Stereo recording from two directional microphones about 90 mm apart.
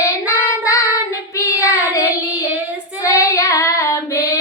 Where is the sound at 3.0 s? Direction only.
40° left (ahead or behind).